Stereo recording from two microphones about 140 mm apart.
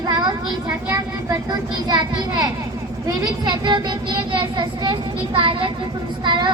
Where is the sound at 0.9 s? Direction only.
25° right (ahead or behind).